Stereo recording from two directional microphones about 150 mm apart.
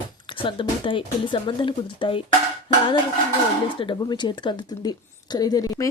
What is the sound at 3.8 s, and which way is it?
A woman's voice, 30° left (ahead or behind).